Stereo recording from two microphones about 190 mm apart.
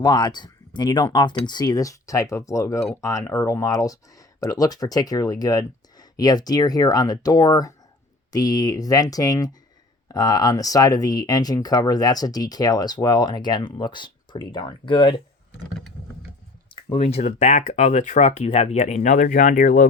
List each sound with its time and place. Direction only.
0.0 s speech: 20° left (ahead or behind)
16.9 s speech: 35° left (ahead or behind)